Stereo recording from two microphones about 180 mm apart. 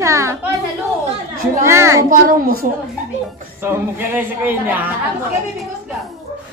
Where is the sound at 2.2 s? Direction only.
50° right (ahead or behind).